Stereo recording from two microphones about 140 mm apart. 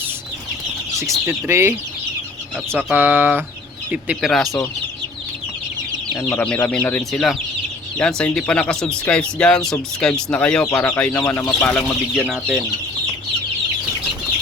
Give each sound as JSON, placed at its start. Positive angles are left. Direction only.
{"t": 0.9, "sound": "speech", "side_deg": -20}
{"t": 2.7, "sound": "speech", "side_deg": -15}
{"t": 4.3, "sound": "chicken", "side_deg": 5}
{"t": 6.2, "sound": "speech", "side_deg": 10}
{"t": 10.0, "sound": "chicken", "side_deg": 5}
{"t": 10.3, "sound": "speech", "side_deg": 10}
{"t": 12.1, "sound": "chicken", "side_deg": -5}